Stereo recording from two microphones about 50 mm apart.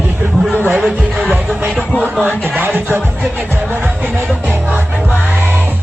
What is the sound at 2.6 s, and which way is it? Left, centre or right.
Music, right.